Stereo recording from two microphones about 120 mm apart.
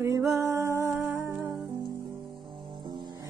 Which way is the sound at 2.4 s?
40° right (ahead or behind).